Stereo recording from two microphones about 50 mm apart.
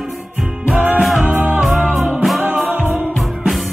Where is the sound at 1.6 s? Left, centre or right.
Centre.